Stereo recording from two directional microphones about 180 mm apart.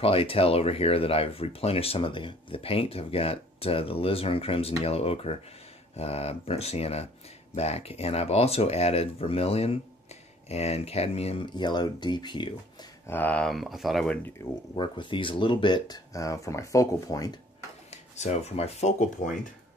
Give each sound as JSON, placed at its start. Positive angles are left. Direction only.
{"t": 0.0, "sound": "speech", "side_deg": 30}
{"t": 13.0, "sound": "speech", "side_deg": 10}
{"t": 14.8, "sound": "speech", "side_deg": 25}
{"t": 18.1, "sound": "speech", "side_deg": 40}